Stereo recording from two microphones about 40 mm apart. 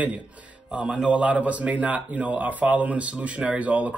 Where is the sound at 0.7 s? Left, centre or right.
Centre.